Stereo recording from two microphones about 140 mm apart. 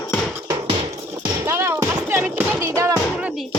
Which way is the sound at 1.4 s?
15° right (ahead or behind).